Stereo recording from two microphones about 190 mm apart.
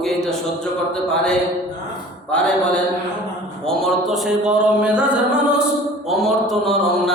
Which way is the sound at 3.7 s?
Centre (ahead or behind).